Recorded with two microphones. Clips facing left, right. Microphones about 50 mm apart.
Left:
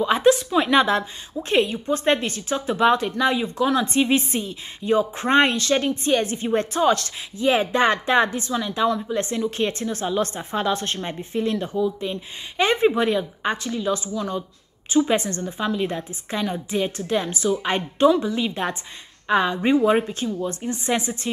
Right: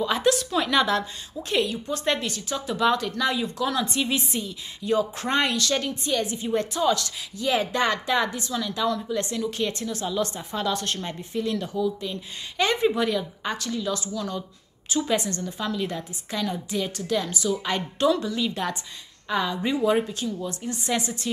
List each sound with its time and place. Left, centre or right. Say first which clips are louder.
0.0 s a sound: left 5 dB; left
1.5 s a woman's voice: left 5 dB; left
7.3 s a woman's voice: left 5 dB; left